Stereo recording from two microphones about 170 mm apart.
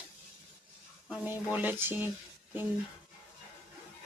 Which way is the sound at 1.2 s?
10° right (ahead or behind).